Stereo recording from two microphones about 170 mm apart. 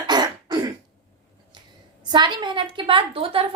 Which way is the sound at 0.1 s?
25° right (ahead or behind).